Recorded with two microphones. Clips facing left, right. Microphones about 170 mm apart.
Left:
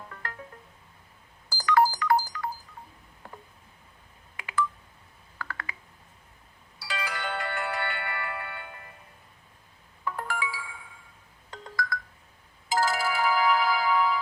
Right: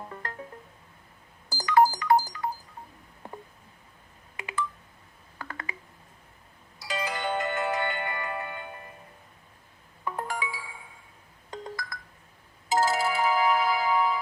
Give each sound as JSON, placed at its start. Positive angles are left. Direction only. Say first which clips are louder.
{"t": 0.1, "sound": "music", "louder": "right 3 dB", "side_deg": -25}
{"t": 1.5, "sound": "telephone dialing", "louder": "right 2 dB", "side_deg": -20}
{"t": 3.2, "sound": "a sound", "louder": "right 4 dB", "side_deg": -20}
{"t": 4.4, "sound": "telephone dialing", "louder": "left 3 dB", "side_deg": -20}
{"t": 5.4, "sound": "a sound", "louder": "even", "side_deg": -20}
{"t": 6.8, "sound": "music", "louder": "right 3 dB", "side_deg": -20}
{"t": 10.0, "sound": "music", "louder": "even", "side_deg": -20}